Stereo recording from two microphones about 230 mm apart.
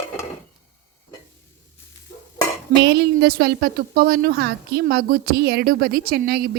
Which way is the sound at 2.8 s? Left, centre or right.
Right.